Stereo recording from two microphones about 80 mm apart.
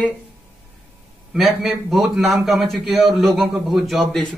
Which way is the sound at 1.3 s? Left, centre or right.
Centre.